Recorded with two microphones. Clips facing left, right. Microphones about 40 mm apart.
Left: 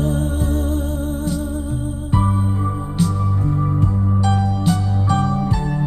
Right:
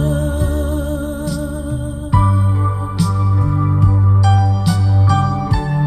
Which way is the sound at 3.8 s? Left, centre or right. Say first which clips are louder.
Right 2 dB; right.